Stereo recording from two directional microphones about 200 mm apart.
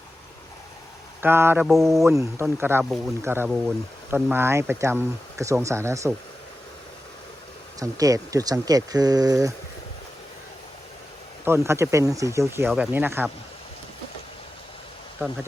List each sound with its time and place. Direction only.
1.2 s speech: 10° right (ahead or behind)
2.0 s speech: 15° right (ahead or behind)
7.8 s speech: 15° right (ahead or behind)
11.4 s speech: 15° right (ahead or behind)